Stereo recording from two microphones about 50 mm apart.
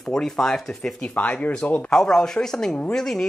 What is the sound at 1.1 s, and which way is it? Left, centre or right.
Speech, left.